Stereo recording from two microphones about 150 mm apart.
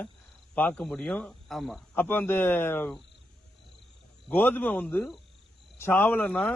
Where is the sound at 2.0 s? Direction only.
15° left (ahead or behind).